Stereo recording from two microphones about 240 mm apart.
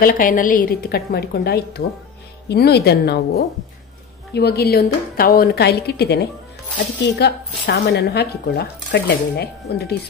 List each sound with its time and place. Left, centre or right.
0.0 s a woman's voice: left
4.3 s speech: left